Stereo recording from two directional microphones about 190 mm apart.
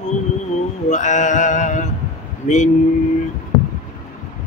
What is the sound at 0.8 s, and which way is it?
Mantra, 40° left (ahead or behind).